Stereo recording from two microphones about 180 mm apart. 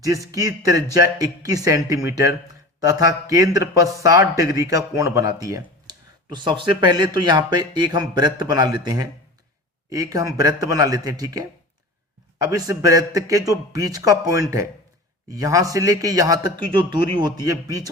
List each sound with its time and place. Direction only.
0.0 s a man's voice: 20° right (ahead or behind)